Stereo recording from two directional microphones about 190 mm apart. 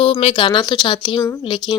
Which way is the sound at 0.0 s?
35° left (ahead or behind).